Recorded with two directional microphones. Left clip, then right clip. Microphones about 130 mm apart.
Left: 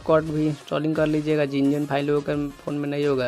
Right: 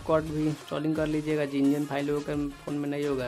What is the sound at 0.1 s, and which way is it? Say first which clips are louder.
Speech: left 4 dB; 30° left (ahead or behind).